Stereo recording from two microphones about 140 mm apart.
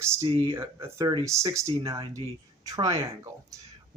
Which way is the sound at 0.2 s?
40° right (ahead or behind).